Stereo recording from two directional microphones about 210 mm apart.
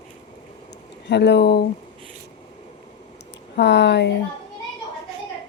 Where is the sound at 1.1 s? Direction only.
55° left (ahead or behind).